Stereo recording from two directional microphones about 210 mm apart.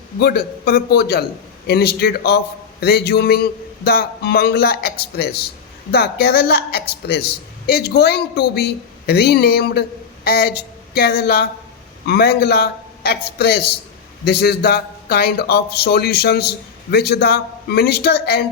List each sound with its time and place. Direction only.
0.2 s a man's voice: 50° left (ahead or behind)